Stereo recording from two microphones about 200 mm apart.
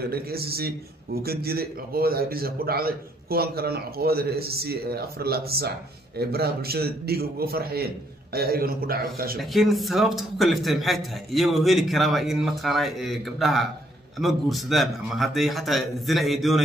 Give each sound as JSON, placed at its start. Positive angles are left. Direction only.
{"t": 0.1, "sound": "a man's voice", "side_deg": -50}
{"t": 9.4, "sound": "a man's voice", "side_deg": 0}